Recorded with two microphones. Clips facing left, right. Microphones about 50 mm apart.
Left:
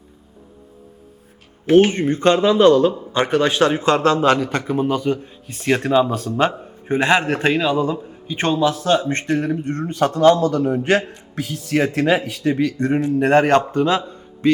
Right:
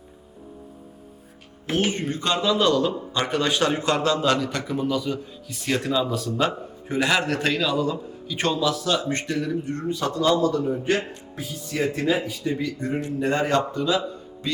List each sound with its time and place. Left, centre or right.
1.6 s a man's voice: left